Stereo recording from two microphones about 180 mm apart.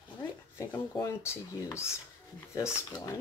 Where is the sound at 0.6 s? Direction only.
15° left (ahead or behind).